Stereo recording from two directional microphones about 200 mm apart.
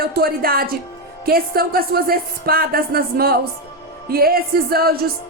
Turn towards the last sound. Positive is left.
turn(degrees=-50)  # may be behind; listen again after turning